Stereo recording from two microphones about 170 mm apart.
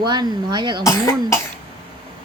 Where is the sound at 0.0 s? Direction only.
25° right (ahead or behind).